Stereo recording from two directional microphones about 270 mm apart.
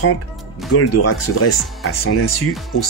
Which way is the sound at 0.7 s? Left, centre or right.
Left.